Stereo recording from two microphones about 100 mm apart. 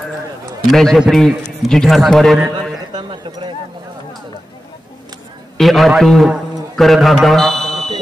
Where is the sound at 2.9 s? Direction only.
45° right (ahead or behind).